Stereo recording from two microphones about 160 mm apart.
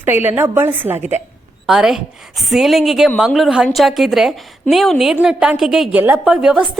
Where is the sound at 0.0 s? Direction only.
10° right (ahead or behind).